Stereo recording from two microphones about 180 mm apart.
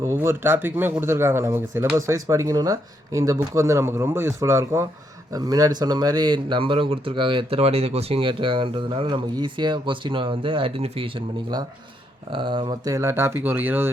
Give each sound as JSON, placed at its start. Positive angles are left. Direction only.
{"t": 0.1, "sound": "speech", "side_deg": -15}